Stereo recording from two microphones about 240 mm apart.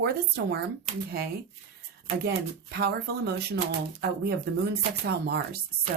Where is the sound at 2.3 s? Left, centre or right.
Right.